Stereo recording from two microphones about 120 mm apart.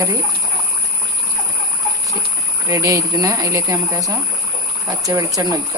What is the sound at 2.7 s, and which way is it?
Speech, 25° right (ahead or behind).